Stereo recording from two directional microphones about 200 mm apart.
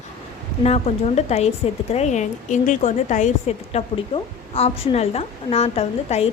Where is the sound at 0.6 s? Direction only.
30° left (ahead or behind).